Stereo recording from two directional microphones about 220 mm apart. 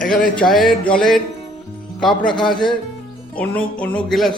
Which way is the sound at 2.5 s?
20° left (ahead or behind).